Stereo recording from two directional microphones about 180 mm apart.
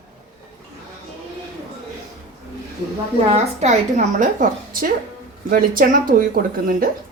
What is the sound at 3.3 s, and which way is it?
A woman's voice, 40° right (ahead or behind).